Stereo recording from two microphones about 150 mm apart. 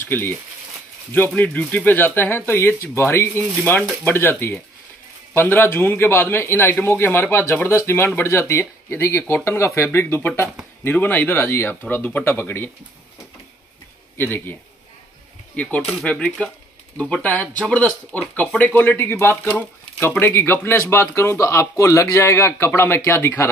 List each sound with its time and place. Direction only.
0.0 s speech: 15° left (ahead or behind)
14.1 s speech: 15° left (ahead or behind)